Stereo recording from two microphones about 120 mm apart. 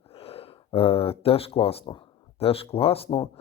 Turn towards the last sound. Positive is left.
turn(degrees=50)  # may be behind; listen again after turning